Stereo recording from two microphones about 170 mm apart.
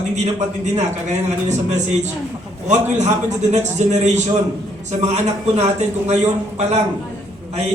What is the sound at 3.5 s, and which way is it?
A man's voice, 45° right (ahead or behind).